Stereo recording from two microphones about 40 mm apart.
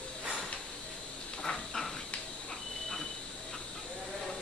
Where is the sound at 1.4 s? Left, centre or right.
Centre.